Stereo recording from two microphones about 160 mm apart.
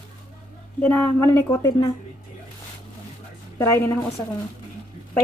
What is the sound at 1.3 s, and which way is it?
Speech, 25° left (ahead or behind).